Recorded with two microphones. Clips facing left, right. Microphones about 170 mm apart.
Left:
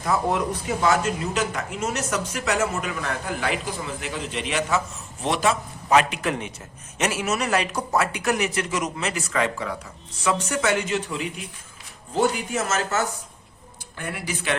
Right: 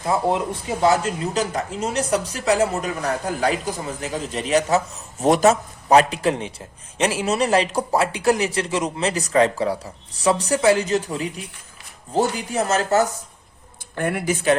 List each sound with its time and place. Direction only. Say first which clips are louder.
0.0 s speech: right 2 dB; 25° right (ahead or behind)
13.9 s speech: right 9 dB; 55° right (ahead or behind)